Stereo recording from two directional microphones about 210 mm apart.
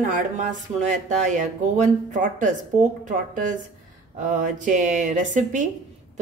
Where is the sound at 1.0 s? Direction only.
35° right (ahead or behind).